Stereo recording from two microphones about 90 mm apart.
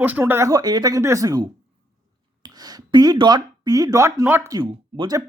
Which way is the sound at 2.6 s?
50° right (ahead or behind).